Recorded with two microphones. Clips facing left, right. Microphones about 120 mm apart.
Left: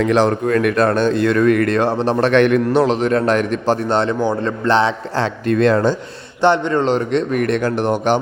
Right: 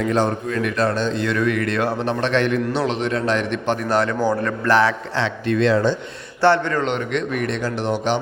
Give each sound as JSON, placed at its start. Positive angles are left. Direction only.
{"t": 0.0, "sound": "speech", "side_deg": 85}
{"t": 1.8, "sound": "a man's voice", "side_deg": 30}
{"t": 2.2, "sound": "a man's voice", "side_deg": 60}
{"t": 2.6, "sound": "a man's voice", "side_deg": 40}
{"t": 5.1, "sound": "speech", "side_deg": 45}
{"t": 6.4, "sound": "a man's voice", "side_deg": 20}
{"t": 6.8, "sound": "a man's voice", "side_deg": 35}
{"t": 7.3, "sound": "speech", "side_deg": 55}